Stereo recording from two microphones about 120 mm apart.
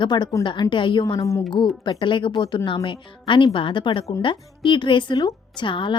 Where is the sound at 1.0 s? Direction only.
30° left (ahead or behind).